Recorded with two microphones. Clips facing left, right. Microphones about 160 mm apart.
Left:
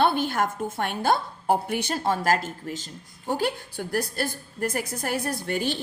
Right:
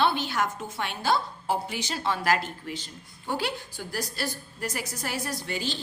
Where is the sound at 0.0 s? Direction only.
50° left (ahead or behind).